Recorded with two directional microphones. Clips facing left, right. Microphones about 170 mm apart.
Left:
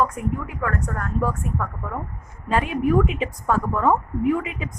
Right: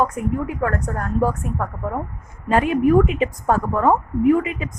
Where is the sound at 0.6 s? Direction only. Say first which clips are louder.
Right 3 dB; 40° right (ahead or behind).